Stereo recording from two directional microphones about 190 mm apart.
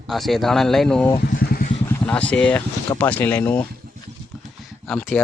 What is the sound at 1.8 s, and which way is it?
Speech, 5° left (ahead or behind).